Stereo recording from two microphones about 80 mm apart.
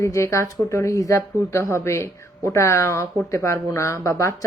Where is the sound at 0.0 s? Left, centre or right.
Left.